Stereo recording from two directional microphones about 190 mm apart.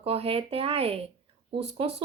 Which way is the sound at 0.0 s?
30° right (ahead or behind).